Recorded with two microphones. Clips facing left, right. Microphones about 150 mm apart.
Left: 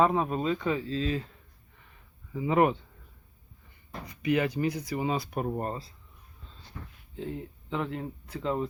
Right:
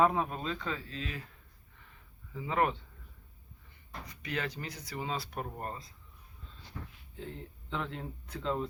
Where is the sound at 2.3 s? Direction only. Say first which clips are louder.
Left 7 dB; 15° left (ahead or behind).